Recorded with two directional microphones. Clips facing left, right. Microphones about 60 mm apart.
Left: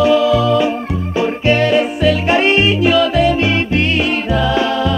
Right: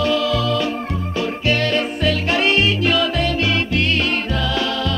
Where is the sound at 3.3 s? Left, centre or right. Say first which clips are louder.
Left 5 dB; left.